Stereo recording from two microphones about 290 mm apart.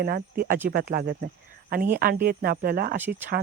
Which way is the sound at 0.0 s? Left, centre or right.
Right.